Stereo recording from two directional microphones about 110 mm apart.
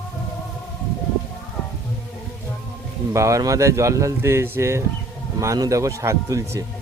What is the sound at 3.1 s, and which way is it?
Speech, 30° right (ahead or behind).